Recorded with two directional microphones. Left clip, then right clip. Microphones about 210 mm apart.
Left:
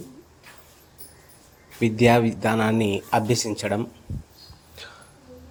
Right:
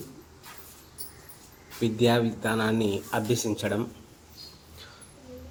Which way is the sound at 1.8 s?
30° left (ahead or behind).